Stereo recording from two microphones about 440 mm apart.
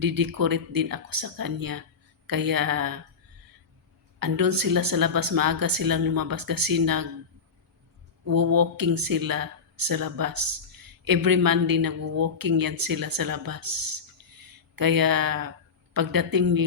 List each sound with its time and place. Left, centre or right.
0.0 s speech: right
4.2 s speech: right
8.2 s a sound: right
8.5 s speech: right